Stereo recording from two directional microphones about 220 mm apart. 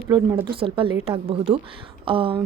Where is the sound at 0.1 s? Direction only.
15° right (ahead or behind).